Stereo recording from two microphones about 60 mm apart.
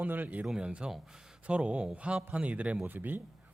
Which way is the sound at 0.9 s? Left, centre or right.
Centre.